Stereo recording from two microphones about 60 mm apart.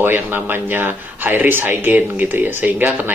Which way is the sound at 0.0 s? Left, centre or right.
Right.